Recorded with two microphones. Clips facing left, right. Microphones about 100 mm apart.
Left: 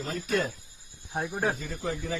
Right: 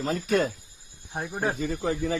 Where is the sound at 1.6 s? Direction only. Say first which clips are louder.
Right 6 dB; 60° right (ahead or behind).